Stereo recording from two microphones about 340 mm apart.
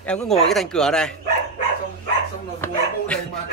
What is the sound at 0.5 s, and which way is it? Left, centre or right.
Speech, centre.